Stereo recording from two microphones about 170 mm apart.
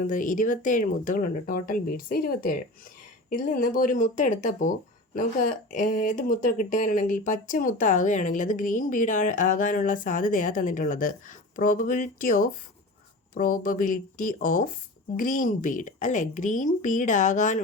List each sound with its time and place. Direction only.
0.0 s speech: 50° left (ahead or behind)